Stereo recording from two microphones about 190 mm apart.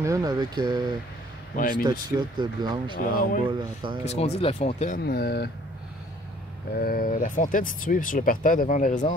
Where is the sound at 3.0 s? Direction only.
50° left (ahead or behind).